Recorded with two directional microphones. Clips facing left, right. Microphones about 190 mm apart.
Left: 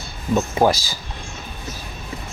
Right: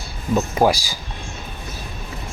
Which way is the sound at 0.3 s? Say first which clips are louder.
Even; 10° right (ahead or behind).